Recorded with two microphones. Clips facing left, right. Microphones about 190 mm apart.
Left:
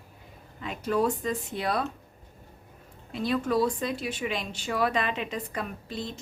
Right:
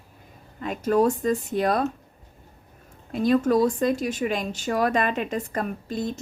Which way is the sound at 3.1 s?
50° right (ahead or behind).